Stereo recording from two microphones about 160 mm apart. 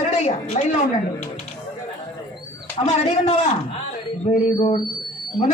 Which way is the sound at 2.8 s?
40° left (ahead or behind).